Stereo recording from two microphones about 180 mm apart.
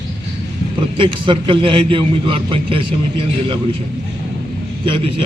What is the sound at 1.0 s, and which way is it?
A man's voice, 25° right (ahead or behind).